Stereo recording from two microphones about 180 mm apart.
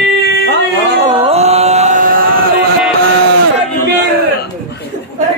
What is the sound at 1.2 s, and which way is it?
Music, 35° right (ahead or behind).